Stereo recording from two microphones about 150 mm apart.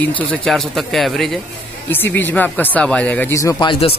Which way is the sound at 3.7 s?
40° left (ahead or behind).